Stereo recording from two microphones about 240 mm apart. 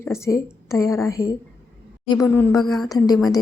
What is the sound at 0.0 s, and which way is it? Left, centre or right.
A woman's voice, centre.